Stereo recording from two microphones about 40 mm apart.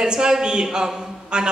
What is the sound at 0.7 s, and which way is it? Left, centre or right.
Mantra, centre.